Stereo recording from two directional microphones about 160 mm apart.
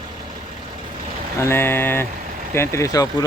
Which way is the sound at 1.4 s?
15° left (ahead or behind).